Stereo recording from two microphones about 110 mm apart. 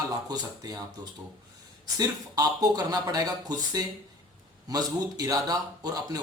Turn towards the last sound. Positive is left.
turn(degrees=-35)  # may be behind; listen again after turning